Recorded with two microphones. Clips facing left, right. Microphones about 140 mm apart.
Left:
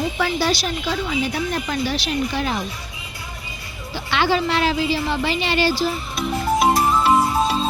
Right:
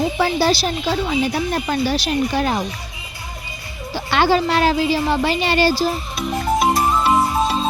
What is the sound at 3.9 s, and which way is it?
A woman's voice, 45° right (ahead or behind).